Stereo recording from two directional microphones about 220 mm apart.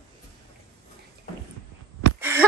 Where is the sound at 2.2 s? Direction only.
10° right (ahead or behind).